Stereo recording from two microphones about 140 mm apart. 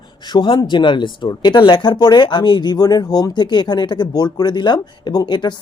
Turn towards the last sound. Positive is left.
turn(degrees=30)  # may be behind; listen again after turning